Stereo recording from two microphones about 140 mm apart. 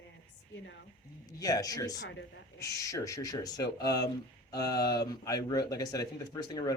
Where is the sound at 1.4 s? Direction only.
25° left (ahead or behind).